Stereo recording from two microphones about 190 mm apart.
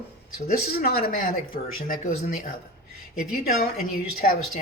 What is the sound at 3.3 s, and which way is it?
Speech, 50° left (ahead or behind).